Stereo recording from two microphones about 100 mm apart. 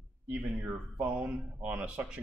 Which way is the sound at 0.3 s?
5° right (ahead or behind).